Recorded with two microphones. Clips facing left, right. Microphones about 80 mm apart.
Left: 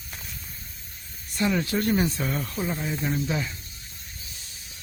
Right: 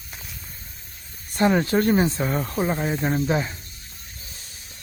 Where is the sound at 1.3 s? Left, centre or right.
Right.